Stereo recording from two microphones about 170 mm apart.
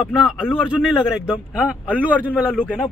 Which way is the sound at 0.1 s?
Centre (ahead or behind).